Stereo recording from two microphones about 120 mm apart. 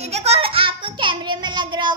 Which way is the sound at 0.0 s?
60° right (ahead or behind).